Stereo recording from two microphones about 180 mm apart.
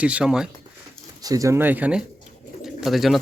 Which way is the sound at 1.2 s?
20° right (ahead or behind).